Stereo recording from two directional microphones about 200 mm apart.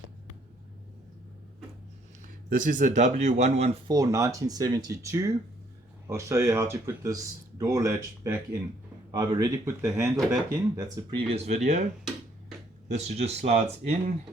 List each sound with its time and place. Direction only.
2.6 s speech: 40° right (ahead or behind)
3.8 s speech: 20° right (ahead or behind)
11.3 s speech: 35° right (ahead or behind)
12.9 s speech: 35° right (ahead or behind)